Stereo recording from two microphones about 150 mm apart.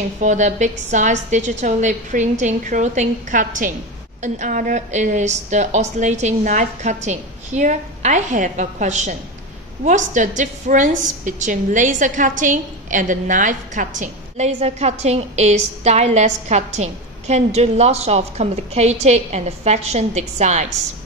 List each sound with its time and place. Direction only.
0.2 s a woman's voice: 55° right (ahead or behind)